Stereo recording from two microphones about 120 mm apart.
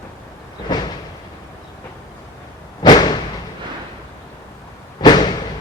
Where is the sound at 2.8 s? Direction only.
35° left (ahead or behind).